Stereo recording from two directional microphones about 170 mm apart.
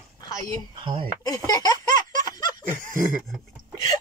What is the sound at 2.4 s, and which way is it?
Snicker, 25° left (ahead or behind).